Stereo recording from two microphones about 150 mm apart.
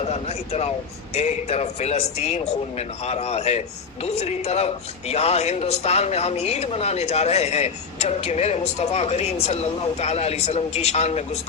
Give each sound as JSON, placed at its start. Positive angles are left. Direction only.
{"t": 0.0, "sound": "speech", "side_deg": 45}